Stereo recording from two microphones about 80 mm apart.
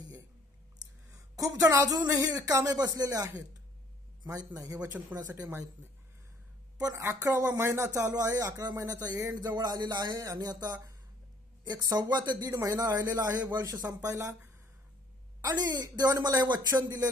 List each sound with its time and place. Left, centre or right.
1.1 s speech: right
4.9 s speech: centre
6.8 s speech: right
8.1 s speech: right
11.7 s speech: right
12.0 s speech: right
12.5 s speech: right
13.2 s speech: right
13.5 s speech: right
15.4 s speech: right